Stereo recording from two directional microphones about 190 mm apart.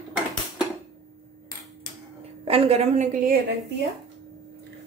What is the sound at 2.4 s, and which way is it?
Speech, 30° right (ahead or behind).